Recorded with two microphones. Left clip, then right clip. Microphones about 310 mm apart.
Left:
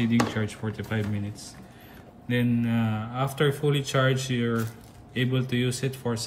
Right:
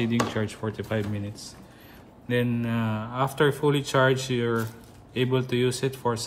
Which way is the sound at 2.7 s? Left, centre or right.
Centre.